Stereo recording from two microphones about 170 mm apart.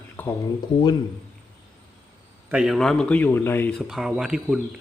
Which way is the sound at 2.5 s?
5° right (ahead or behind).